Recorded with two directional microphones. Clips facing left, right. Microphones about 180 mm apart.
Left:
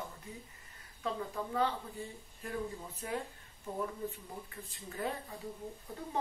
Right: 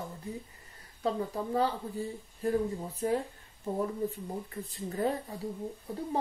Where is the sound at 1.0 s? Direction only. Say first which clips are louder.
Right 6 dB; 35° right (ahead or behind).